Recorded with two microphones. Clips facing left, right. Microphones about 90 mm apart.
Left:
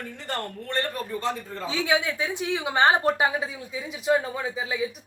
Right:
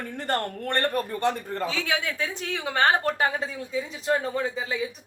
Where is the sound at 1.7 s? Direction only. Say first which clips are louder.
Left 3 dB; 20° left (ahead or behind).